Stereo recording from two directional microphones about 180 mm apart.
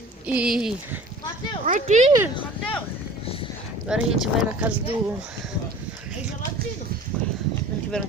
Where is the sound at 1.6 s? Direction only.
45° right (ahead or behind).